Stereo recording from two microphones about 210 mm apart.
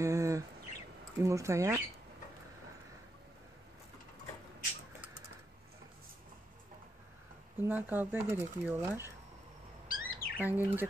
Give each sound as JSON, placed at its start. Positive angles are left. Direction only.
{"t": 0.0, "sound": "bird", "side_deg": -15}
{"t": 1.2, "sound": "speech", "side_deg": -15}
{"t": 7.5, "sound": "speech", "side_deg": -10}
{"t": 9.8, "sound": "chirp", "side_deg": 45}
{"t": 10.4, "sound": "speech", "side_deg": -10}